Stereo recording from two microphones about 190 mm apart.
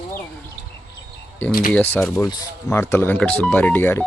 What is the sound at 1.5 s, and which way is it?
Speech, 50° left (ahead or behind).